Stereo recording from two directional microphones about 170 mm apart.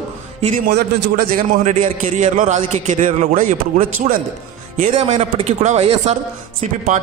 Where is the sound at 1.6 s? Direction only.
45° right (ahead or behind).